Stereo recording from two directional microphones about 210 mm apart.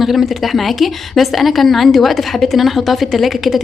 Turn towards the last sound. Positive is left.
turn(degrees=0)  # may be behind; listen again after turning